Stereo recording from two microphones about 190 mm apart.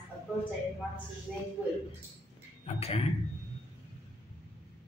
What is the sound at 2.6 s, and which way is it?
Speech, 35° left (ahead or behind).